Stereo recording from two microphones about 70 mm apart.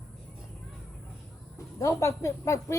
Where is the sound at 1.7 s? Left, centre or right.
Left.